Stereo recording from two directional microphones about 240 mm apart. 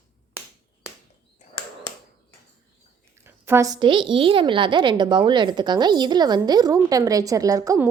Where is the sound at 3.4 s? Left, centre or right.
Centre.